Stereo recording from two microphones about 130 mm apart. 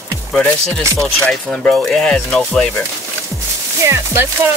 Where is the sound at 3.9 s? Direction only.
20° right (ahead or behind).